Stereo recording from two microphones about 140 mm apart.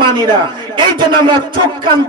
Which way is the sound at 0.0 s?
35° right (ahead or behind).